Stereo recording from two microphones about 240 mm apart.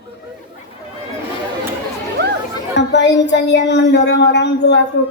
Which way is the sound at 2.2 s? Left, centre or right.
Right.